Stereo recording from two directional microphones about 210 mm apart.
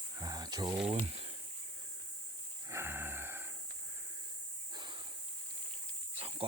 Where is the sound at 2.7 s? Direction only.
10° right (ahead or behind).